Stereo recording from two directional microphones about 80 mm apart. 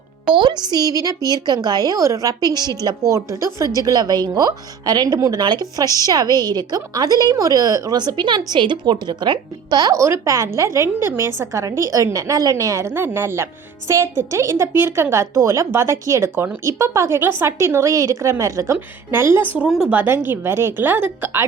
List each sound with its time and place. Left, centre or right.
0.3 s a woman's voice: right
3.1 s a woman's voice: right
3.8 s a woman's voice: right
7.9 s a woman's voice: right
9.9 s a woman's voice: right